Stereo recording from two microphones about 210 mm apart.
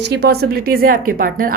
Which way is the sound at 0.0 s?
50° right (ahead or behind).